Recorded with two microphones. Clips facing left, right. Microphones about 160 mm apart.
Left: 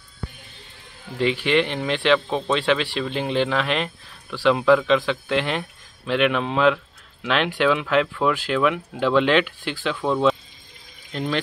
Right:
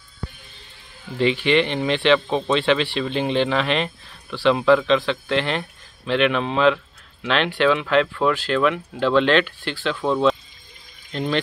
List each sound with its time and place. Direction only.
1.1 s speech: 5° left (ahead or behind)